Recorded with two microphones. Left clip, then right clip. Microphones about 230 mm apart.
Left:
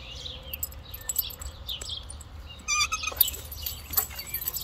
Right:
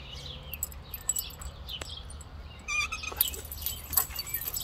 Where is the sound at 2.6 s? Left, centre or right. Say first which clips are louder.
Left 4 dB; left.